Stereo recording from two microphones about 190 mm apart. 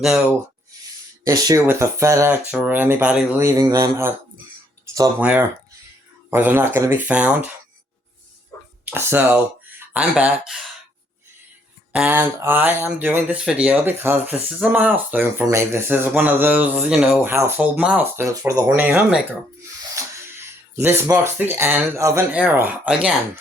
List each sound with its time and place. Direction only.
1.2 s speech: 20° right (ahead or behind)
5.2 s speech: 10° right (ahead or behind)
8.9 s speech: 10° right (ahead or behind)
11.9 s speech: 10° right (ahead or behind)